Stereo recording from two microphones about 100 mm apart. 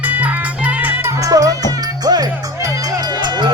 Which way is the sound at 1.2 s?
35° right (ahead or behind).